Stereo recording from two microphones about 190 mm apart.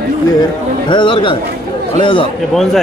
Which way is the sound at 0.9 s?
25° left (ahead or behind).